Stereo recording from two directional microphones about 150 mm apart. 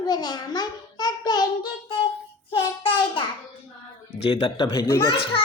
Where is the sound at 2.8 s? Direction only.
35° left (ahead or behind).